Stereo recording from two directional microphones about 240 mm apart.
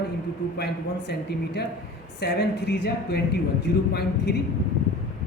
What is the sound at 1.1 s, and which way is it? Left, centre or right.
Speech, left.